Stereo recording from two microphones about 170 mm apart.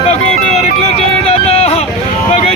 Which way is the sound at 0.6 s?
40° left (ahead or behind).